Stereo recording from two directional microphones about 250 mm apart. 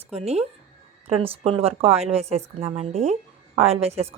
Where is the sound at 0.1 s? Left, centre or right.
Right.